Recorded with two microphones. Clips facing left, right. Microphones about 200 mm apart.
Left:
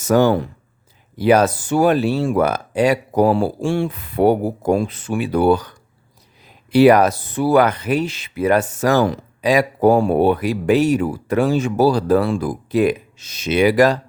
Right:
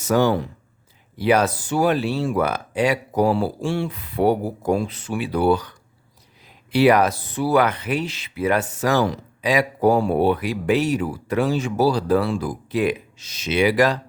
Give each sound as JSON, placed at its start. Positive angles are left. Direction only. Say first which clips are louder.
{"t": 0.0, "sound": "speech", "louder": "left 4 dB", "side_deg": 45}